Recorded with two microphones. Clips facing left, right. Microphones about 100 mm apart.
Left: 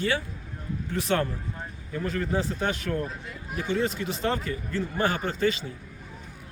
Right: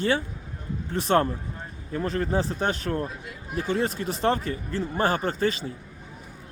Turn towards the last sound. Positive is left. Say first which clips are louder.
# right 1 dB
turn(degrees=-40)  # may be behind; listen again after turning